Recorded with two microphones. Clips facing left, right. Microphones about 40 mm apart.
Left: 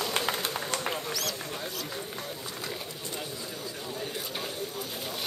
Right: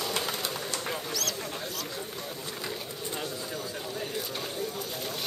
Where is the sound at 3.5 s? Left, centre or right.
Centre.